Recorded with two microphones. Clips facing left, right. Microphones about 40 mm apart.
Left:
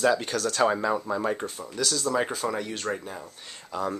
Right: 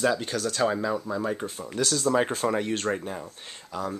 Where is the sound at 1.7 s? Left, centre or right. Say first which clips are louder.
Right 2 dB; right.